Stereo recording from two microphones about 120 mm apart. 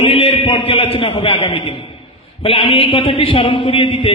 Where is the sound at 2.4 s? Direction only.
50° left (ahead or behind).